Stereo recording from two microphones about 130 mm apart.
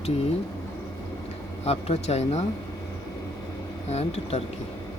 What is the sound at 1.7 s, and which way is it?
Speech, 55° left (ahead or behind).